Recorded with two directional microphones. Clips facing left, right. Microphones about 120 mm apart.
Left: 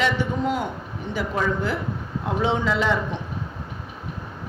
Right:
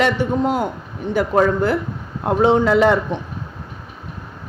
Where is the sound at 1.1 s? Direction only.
55° right (ahead or behind).